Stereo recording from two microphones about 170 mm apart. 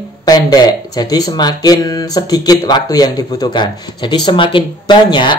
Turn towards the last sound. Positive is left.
turn(degrees=25)  # may be behind; listen again after turning